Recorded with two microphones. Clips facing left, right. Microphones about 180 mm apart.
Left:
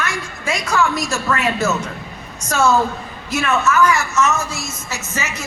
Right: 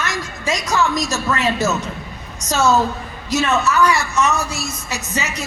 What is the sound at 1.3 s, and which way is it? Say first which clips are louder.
Speech: left 1 dB; 20° right (ahead or behind).